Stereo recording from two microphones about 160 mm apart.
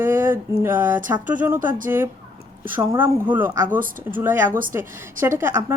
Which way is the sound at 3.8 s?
60° right (ahead or behind).